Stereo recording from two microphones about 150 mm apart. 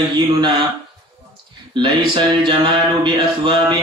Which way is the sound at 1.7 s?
30° right (ahead or behind).